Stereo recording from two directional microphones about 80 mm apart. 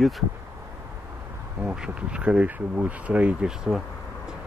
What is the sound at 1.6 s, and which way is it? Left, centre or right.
Speech, centre.